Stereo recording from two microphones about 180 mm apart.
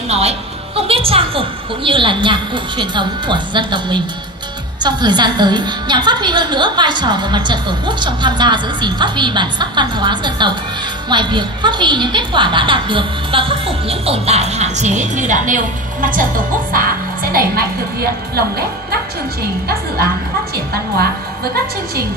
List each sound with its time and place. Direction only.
0.1 s a woman's voice: 35° right (ahead or behind); by 18.4 s 60° right (ahead or behind)
20.5 s a woman's voice: 60° right (ahead or behind)